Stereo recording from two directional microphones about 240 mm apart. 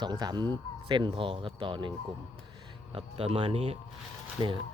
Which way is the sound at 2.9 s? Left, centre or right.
Right.